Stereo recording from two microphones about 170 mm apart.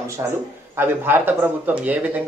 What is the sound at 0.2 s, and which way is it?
A man's voice, 20° right (ahead or behind).